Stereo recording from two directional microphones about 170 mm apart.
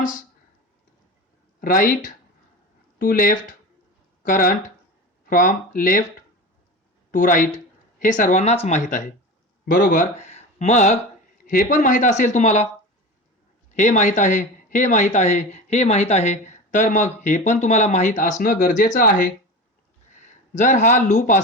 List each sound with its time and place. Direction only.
0.0 s speech: 50° left (ahead or behind)
1.6 s speech: 55° left (ahead or behind)
7.1 s speech: 50° left (ahead or behind)
11.4 s speech: 55° left (ahead or behind)
13.7 s speech: 45° left (ahead or behind)